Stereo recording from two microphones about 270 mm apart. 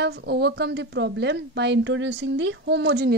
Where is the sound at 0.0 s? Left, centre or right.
Right.